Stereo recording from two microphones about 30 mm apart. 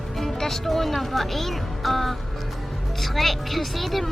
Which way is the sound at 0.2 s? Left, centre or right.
Centre.